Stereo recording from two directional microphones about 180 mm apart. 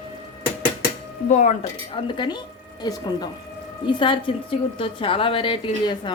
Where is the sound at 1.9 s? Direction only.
25° left (ahead or behind).